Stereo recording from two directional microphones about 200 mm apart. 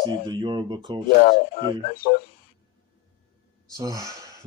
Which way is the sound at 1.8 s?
45° left (ahead or behind).